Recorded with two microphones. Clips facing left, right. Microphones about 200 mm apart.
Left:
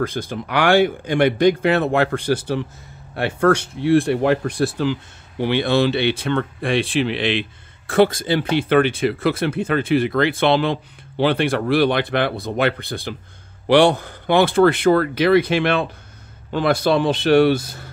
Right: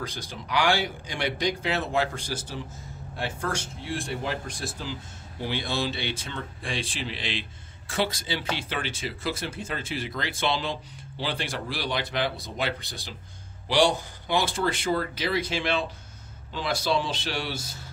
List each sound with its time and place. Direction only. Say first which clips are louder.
0.0 s speech: left 12 dB; 55° left (ahead or behind)